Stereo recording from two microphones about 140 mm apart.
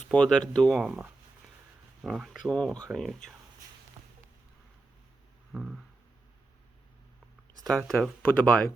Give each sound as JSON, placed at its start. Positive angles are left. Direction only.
{"t": 0.1, "sound": "speech", "side_deg": 5}
{"t": 5.5, "sound": "a sound", "side_deg": -5}
{"t": 7.7, "sound": "speech", "side_deg": 5}